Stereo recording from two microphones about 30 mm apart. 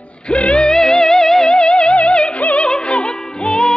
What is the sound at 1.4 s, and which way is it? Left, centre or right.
Music, left.